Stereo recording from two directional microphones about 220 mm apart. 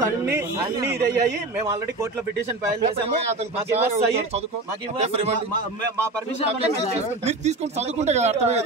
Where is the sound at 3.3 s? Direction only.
30° right (ahead or behind).